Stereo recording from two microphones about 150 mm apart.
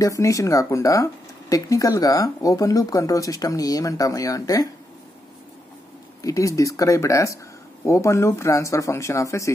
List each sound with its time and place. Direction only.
0.0 s speech: 20° left (ahead or behind)
6.2 s speech: 20° left (ahead or behind)